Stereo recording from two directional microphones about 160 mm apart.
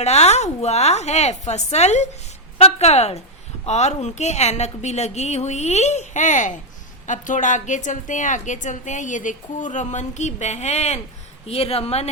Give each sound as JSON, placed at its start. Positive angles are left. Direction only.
{"t": 0.0, "sound": "a woman's voice", "side_deg": 45}